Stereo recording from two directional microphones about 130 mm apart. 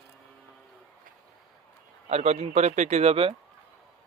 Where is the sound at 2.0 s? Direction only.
55° right (ahead or behind).